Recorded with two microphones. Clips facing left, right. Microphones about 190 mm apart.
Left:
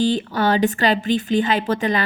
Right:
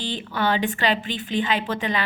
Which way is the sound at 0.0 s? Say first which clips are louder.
Left 7 dB; 40° left (ahead or behind).